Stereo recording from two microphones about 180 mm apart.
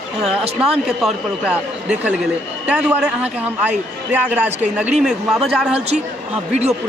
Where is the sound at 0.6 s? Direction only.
5° right (ahead or behind).